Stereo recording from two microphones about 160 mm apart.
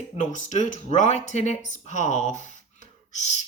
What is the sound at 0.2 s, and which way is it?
Speech, 50° left (ahead or behind).